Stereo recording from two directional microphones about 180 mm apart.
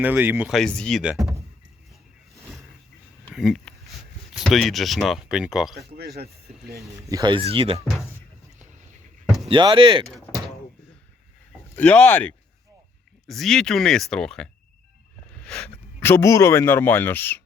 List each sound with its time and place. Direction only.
0.0 s speech: 10° right (ahead or behind)
0.5 s speech: 5° left (ahead or behind)
3.3 s a sound: centre (ahead or behind)
4.4 s speech: centre (ahead or behind)
6.7 s speech: 20° right (ahead or behind)
9.5 s speech: 25° right (ahead or behind)
11.8 s speech: 5° left (ahead or behind)